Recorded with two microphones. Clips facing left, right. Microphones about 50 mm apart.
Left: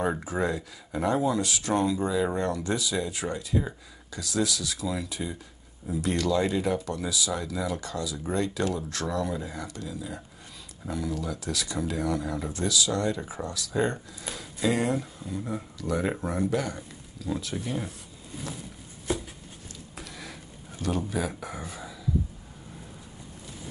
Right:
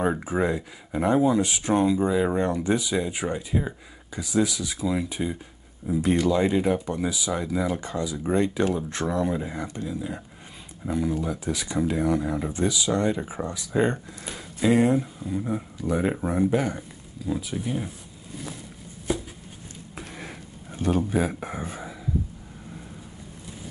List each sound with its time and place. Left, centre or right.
0.2 s speech: centre
17.3 s speech: centre
20.0 s a sound: right
21.1 s speech: right